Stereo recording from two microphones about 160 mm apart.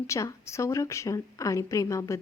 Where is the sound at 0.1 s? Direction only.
20° left (ahead or behind).